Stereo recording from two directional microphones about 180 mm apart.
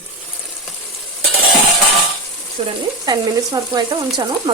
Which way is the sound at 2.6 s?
35° right (ahead or behind).